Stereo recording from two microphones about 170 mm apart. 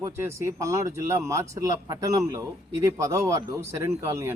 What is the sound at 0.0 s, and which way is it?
Speech, 15° right (ahead or behind).